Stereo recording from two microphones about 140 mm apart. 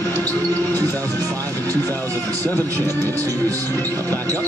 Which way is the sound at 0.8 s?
15° left (ahead or behind).